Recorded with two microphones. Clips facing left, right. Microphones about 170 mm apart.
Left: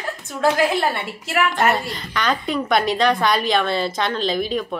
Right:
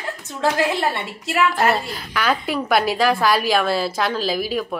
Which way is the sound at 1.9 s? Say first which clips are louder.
Right 1 dB; 5° right (ahead or behind).